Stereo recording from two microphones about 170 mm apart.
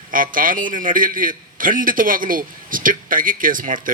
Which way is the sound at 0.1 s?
55° right (ahead or behind).